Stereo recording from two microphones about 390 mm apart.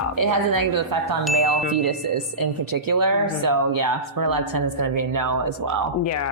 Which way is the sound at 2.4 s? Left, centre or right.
Right.